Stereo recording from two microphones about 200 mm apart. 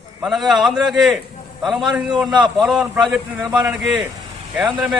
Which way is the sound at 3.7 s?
Centre (ahead or behind).